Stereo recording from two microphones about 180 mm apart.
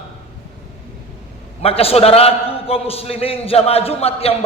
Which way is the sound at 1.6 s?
35° left (ahead or behind).